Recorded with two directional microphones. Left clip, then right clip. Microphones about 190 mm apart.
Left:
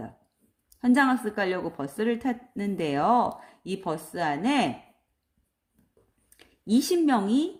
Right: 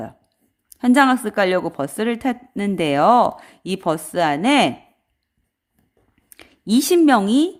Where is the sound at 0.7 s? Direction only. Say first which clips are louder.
Right 8 dB; 45° right (ahead or behind).